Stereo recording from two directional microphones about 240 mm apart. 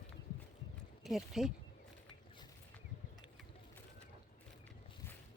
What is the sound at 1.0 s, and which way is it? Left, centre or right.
Speech, centre.